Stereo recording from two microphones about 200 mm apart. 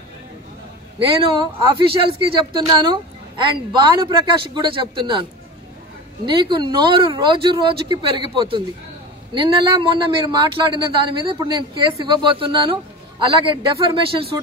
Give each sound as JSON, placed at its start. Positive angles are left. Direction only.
{"t": 0.9, "sound": "a man's voice", "side_deg": -25}
{"t": 6.2, "sound": "a man's voice", "side_deg": -25}